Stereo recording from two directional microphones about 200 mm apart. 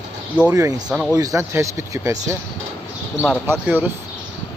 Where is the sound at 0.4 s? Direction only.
15° right (ahead or behind).